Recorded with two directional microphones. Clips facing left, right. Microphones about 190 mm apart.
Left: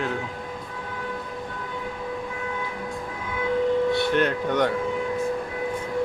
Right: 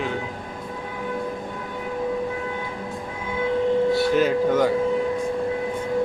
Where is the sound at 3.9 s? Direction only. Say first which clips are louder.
Right 3 dB; centre (ahead or behind).